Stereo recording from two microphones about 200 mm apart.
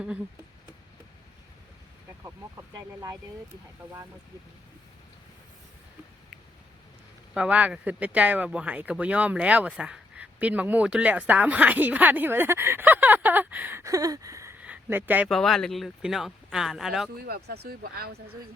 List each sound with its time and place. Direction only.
2.2 s speech: 15° right (ahead or behind)
7.3 s speech: 5° right (ahead or behind)
15.3 s speech: centre (ahead or behind)
17.2 s speech: 50° right (ahead or behind)